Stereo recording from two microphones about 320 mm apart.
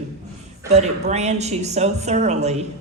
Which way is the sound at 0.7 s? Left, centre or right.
Right.